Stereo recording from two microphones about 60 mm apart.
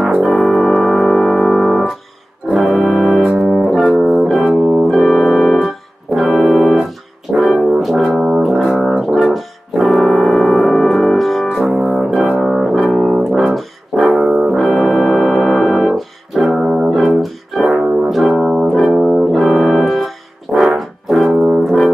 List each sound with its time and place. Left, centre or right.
0.2 s music: centre
4.5 s music: right
4.8 s organ: centre
6.1 s music: centre
7.5 s brass instrument: centre
9.1 s music: centre
11.7 s brass instrument: centre
14.3 s music: centre
14.6 s music: centre
16.9 s music: centre
18.3 s music: centre
20.5 s brass instrument: centre